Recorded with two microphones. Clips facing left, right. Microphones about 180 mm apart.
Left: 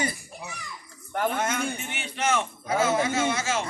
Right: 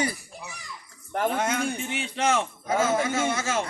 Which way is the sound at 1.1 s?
30° right (ahead or behind).